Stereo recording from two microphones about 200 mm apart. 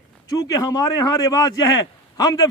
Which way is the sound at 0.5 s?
15° left (ahead or behind).